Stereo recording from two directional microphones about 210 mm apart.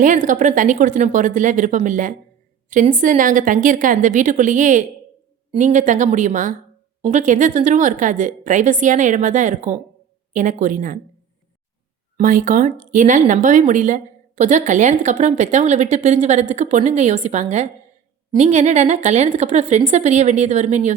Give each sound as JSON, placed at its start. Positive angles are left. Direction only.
{"t": 0.0, "sound": "speech", "side_deg": -35}
{"t": 12.1, "sound": "speech", "side_deg": -40}